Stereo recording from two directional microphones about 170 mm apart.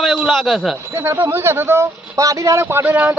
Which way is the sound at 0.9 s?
10° right (ahead or behind).